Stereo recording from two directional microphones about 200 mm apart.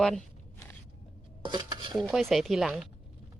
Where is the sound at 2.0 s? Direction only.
Centre (ahead or behind).